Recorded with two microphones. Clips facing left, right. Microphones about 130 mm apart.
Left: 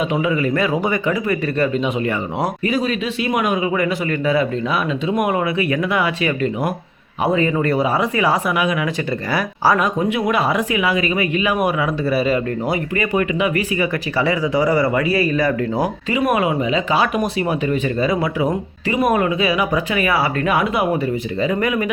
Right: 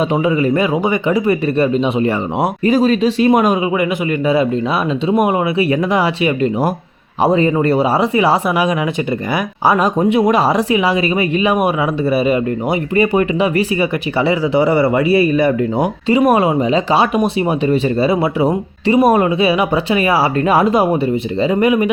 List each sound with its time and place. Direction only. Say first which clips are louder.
0.1 s speech: right 4 dB; 30° right (ahead or behind)
5.0 s speech: right 5 dB; 30° right (ahead or behind)
10.1 s speech: right 6 dB; 35° right (ahead or behind)